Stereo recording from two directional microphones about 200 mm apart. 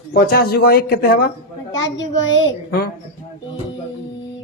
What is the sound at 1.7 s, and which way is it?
Speech, 20° left (ahead or behind).